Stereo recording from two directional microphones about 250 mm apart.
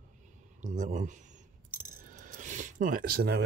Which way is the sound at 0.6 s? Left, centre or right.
Right.